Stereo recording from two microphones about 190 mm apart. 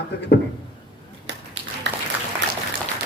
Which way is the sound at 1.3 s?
65° right (ahead or behind).